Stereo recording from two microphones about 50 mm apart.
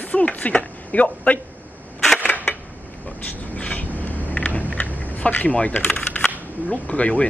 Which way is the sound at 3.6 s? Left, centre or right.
Left.